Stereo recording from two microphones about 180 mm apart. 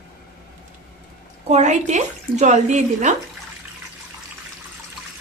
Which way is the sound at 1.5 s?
40° right (ahead or behind).